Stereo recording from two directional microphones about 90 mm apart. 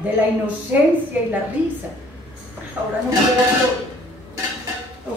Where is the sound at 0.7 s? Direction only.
20° right (ahead or behind).